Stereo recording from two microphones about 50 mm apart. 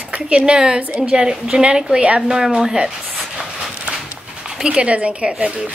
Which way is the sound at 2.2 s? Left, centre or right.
Centre.